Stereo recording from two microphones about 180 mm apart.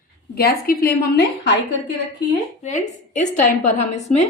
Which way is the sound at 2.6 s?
40° left (ahead or behind).